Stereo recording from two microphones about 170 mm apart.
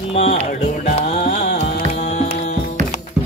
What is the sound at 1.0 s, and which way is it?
Music, 40° left (ahead or behind).